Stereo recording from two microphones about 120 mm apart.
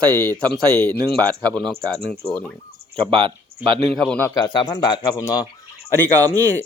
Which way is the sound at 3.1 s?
45° right (ahead or behind).